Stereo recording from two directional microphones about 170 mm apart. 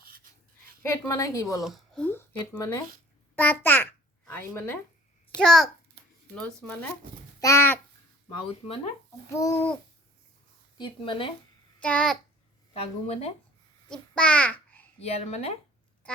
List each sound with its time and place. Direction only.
0.8 s a woman's voice: 15° left (ahead or behind)
1.6 s a woman's voice: centre (ahead or behind)
8.4 s speech: 35° left (ahead or behind)
9.3 s a woman's voice: 20° left (ahead or behind)
10.8 s speech: 30° left (ahead or behind)
11.8 s a woman's voice: 5° left (ahead or behind)
12.7 s speech: 35° left (ahead or behind)
13.9 s a child's voice: 5° left (ahead or behind)
15.0 s speech: 40° left (ahead or behind)